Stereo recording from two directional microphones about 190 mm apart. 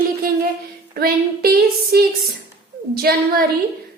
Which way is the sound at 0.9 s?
55° right (ahead or behind).